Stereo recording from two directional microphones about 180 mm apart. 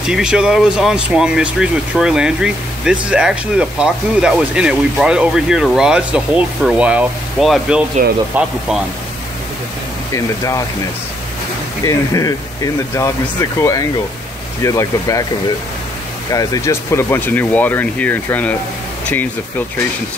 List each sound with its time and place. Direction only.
0.0 s speech: 5° right (ahead or behind)
10.1 s speech: 15° left (ahead or behind)
11.8 s speech: 20° left (ahead or behind)
16.3 s speech: 20° left (ahead or behind)